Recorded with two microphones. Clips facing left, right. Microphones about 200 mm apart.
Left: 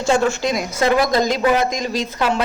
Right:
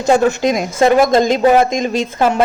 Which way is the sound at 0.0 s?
20° right (ahead or behind).